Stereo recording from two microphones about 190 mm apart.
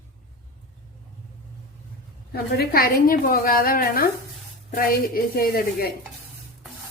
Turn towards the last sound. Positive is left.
turn(degrees=50)  # may be behind; listen again after turning